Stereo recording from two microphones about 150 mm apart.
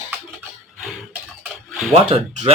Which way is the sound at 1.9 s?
50° right (ahead or behind).